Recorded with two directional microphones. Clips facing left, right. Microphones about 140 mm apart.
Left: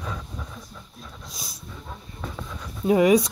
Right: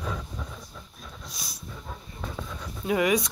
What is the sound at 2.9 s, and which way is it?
Speech, 30° left (ahead or behind).